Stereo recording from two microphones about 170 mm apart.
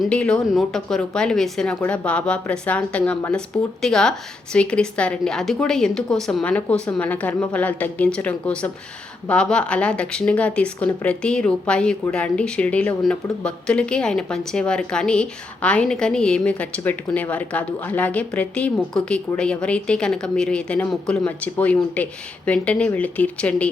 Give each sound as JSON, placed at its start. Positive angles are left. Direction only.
{"t": 0.0, "sound": "speech", "side_deg": 5}